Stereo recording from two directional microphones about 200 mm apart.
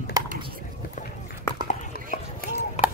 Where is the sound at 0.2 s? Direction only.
15° right (ahead or behind).